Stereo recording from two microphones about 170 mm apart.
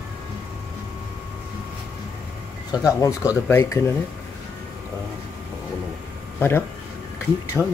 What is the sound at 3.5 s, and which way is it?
Speech, 15° left (ahead or behind).